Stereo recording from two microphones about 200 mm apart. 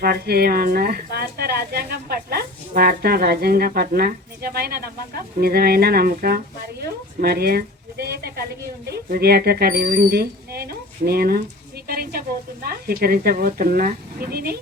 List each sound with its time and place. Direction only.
0.0 s speech: 50° right (ahead or behind)